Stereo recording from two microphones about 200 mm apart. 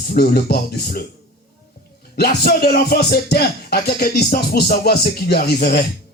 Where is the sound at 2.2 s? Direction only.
50° left (ahead or behind).